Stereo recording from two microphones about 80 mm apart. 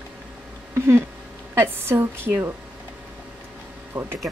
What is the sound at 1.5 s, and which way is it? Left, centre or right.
Speech, right.